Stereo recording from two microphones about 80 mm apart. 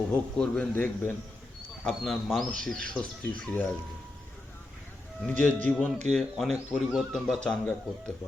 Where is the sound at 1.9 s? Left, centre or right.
Centre.